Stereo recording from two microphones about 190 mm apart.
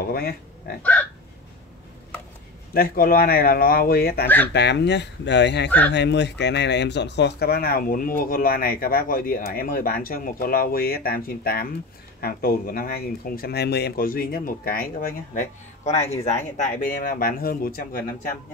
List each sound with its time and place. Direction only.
0.0 s speech: 50° left (ahead or behind)
2.7 s speech: 50° left (ahead or behind)
4.5 s speech: 65° left (ahead or behind)
5.7 s speech: 10° left (ahead or behind)
5.9 s speech: 65° left (ahead or behind)